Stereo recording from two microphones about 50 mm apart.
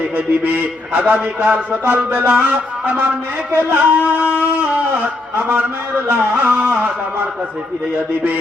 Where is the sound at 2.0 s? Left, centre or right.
Right.